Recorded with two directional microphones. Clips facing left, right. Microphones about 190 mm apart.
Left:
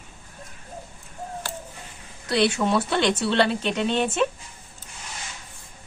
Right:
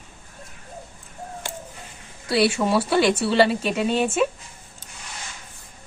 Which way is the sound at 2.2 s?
5° right (ahead or behind).